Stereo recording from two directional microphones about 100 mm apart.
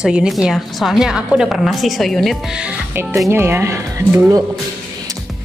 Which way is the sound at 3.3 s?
25° right (ahead or behind).